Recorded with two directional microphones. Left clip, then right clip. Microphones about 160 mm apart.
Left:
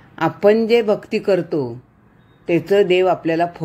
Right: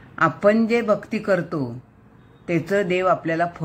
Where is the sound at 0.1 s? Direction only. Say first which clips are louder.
Left 3 dB; 35° left (ahead or behind).